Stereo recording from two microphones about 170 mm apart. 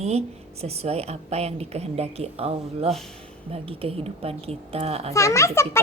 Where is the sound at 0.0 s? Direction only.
40° right (ahead or behind).